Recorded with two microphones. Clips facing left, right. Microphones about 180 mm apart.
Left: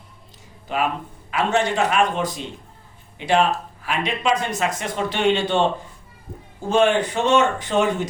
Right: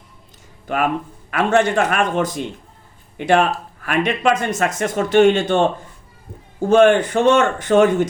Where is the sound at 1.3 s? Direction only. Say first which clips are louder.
Right 4 dB; 55° right (ahead or behind).